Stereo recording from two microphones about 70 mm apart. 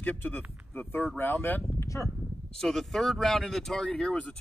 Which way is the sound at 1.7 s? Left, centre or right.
Left.